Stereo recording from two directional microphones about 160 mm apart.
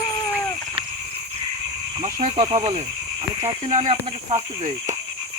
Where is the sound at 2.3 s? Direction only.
30° right (ahead or behind).